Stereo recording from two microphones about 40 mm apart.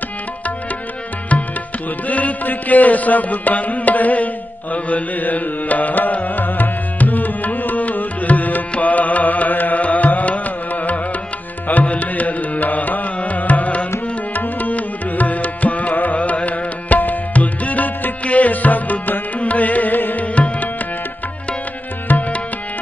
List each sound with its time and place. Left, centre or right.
1.3 s music: left
20.3 s tabla: left
22.1 s music: left